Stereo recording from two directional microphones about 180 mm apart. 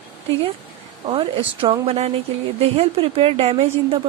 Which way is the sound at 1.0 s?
30° right (ahead or behind).